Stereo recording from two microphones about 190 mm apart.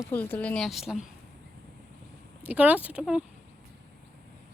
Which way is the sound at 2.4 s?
5° right (ahead or behind).